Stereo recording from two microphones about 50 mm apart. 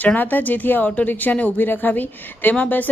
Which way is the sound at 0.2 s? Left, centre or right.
Left.